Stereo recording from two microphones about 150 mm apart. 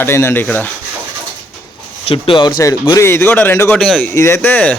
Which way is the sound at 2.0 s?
35° left (ahead or behind).